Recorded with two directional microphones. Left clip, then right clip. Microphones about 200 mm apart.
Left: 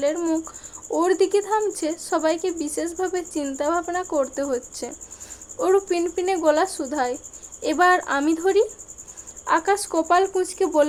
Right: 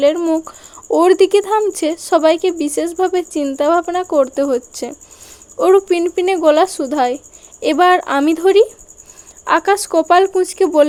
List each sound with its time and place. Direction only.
0.0 s speech: 35° right (ahead or behind)